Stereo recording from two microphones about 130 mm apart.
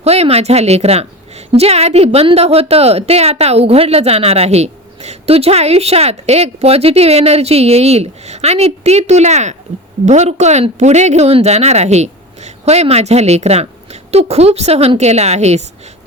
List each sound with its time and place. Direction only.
0.0 s a woman's voice: 55° right (ahead or behind)